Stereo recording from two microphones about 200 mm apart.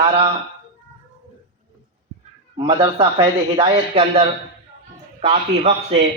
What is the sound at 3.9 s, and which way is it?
A man's voice, 30° right (ahead or behind).